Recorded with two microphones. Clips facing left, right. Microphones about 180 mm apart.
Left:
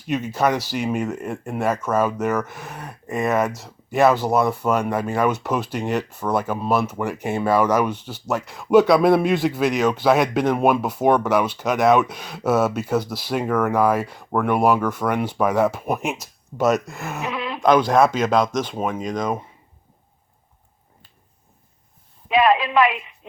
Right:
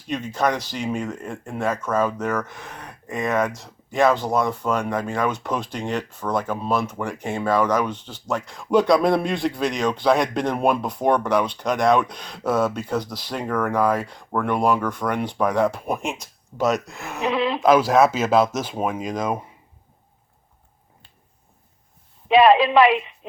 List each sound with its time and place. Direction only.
0.1 s speech: 5° left (ahead or behind)
17.3 s sheep: 30° right (ahead or behind)
17.6 s speech: 5° right (ahead or behind)
22.3 s a woman's voice: 30° right (ahead or behind)